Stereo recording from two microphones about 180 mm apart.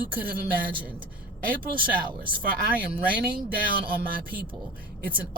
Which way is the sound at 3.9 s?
55° right (ahead or behind).